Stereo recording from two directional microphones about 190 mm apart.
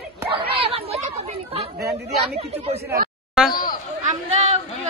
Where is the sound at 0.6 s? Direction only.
30° right (ahead or behind).